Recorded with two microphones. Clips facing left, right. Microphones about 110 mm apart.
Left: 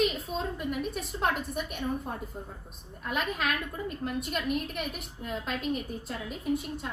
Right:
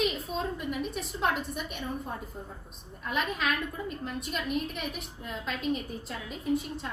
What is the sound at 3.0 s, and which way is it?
A woman's voice, centre (ahead or behind).